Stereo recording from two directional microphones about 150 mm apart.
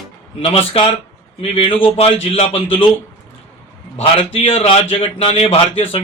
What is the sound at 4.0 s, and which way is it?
A man's voice, 40° left (ahead or behind).